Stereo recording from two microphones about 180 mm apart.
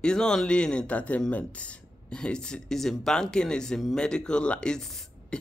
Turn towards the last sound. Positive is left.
turn(degrees=0)  # may be behind; listen again after turning